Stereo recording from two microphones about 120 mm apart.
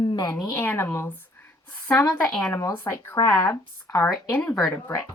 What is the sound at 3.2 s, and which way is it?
Speech, 30° left (ahead or behind).